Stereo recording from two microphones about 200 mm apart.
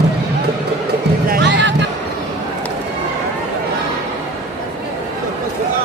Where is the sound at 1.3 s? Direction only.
55° right (ahead or behind).